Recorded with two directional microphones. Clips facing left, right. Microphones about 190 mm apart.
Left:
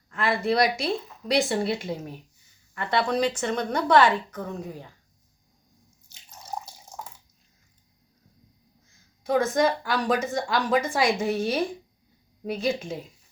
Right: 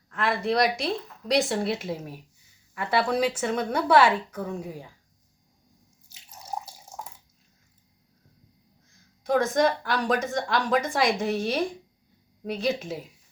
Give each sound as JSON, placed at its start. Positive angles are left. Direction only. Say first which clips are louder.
{"t": 0.1, "sound": "a woman's voice", "louder": "left 1 dB", "side_deg": 0}
{"t": 6.1, "sound": "water", "louder": "right 1 dB", "side_deg": -10}
{"t": 8.9, "sound": "a woman's voice", "louder": "even", "side_deg": 5}